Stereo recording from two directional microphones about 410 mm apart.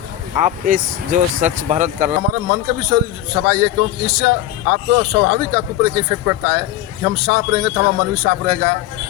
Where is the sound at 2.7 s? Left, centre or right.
Right.